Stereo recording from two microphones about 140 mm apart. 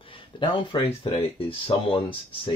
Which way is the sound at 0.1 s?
35° left (ahead or behind).